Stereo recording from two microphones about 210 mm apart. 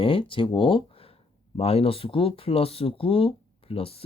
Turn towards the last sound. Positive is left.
turn(degrees=25)  # may be behind; listen again after turning